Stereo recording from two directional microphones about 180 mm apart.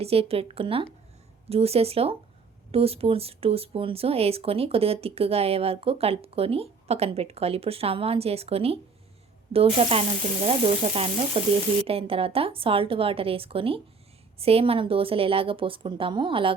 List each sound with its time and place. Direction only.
0.0 s a woman's voice: 35° right (ahead or behind)